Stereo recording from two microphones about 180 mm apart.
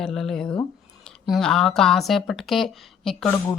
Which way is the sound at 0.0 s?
Centre (ahead or behind).